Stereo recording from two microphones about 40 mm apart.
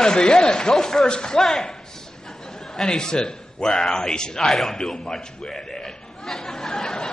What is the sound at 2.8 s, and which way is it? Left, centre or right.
A man's voice, centre.